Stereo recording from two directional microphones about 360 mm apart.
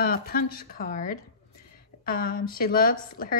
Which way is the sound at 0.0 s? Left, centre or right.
Left.